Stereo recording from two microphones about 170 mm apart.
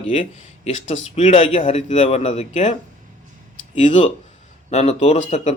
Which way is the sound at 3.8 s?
45° left (ahead or behind).